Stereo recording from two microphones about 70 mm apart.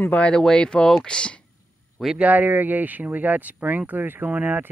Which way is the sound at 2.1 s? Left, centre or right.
Right.